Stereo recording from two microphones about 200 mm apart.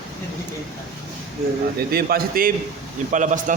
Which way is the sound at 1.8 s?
50° right (ahead or behind).